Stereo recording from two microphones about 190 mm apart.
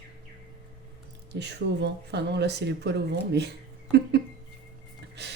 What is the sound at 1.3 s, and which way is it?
Speech, 65° right (ahead or behind).